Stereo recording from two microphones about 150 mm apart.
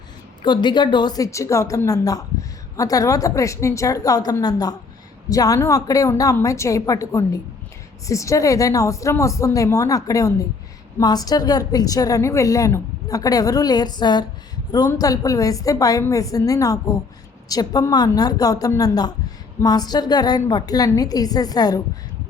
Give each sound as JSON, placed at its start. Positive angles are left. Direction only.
{"t": 0.4, "sound": "a woman's voice", "side_deg": 30}